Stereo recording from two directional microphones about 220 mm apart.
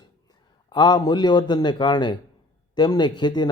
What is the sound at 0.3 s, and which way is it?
A man's voice, 20° left (ahead or behind).